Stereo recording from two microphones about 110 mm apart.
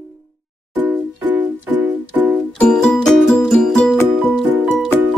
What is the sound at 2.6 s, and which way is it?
Music, 10° left (ahead or behind).